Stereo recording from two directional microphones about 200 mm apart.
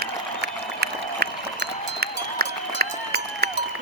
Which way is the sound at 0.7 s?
55° right (ahead or behind).